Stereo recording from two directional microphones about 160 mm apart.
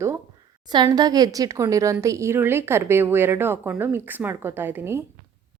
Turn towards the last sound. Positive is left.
turn(degrees=-15)  # may be behind; listen again after turning